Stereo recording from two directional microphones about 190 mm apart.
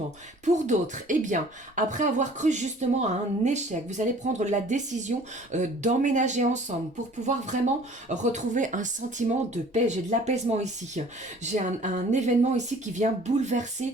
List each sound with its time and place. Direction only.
0.4 s speech: 40° right (ahead or behind)
8.1 s speech: 40° right (ahead or behind)